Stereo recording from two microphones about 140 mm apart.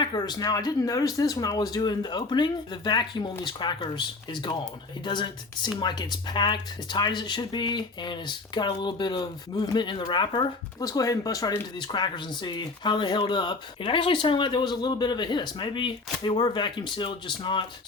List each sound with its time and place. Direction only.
0.0 s speech: 30° left (ahead or behind)